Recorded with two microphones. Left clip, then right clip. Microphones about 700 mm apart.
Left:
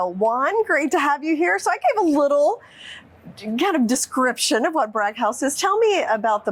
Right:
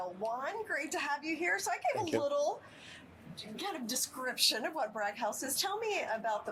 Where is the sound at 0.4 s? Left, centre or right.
Left.